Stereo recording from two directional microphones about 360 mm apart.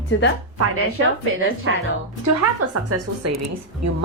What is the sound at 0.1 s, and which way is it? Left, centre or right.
Speech, left.